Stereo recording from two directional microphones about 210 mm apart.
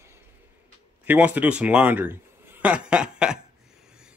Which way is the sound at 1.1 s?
5° right (ahead or behind).